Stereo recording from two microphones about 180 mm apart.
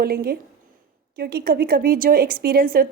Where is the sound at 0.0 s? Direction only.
60° right (ahead or behind).